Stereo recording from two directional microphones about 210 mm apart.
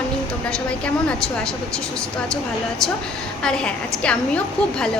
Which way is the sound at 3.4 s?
5° left (ahead or behind).